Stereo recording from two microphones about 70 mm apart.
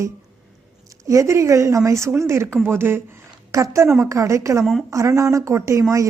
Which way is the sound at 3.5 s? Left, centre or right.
Right.